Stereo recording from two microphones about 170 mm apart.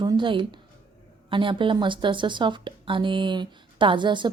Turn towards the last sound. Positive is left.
turn(degrees=-30)  # may be behind; listen again after turning